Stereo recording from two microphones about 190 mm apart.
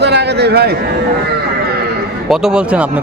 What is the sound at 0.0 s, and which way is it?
Speech, 60° right (ahead or behind).